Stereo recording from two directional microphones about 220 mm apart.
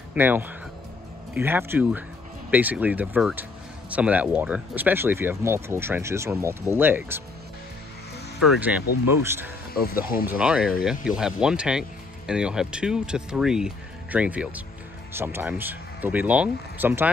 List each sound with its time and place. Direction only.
0.1 s speech: 10° right (ahead or behind)
8.4 s speech: centre (ahead or behind)
9.8 s speech: 40° left (ahead or behind)
10.4 s speech: 5° right (ahead or behind)